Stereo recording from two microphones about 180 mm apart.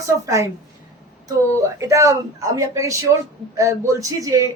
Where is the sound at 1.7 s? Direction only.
15° right (ahead or behind).